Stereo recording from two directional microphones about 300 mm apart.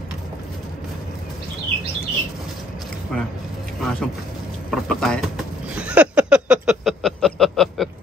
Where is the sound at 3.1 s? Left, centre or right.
Centre.